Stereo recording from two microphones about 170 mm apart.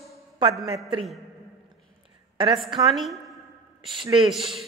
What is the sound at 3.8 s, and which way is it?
Speech, 30° right (ahead or behind).